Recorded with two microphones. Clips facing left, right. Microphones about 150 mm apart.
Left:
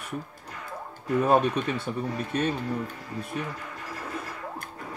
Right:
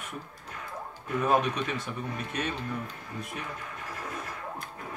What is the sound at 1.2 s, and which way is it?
Speech, 30° left (ahead or behind).